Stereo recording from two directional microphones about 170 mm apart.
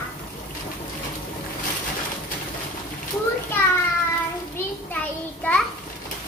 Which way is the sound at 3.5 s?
15° left (ahead or behind).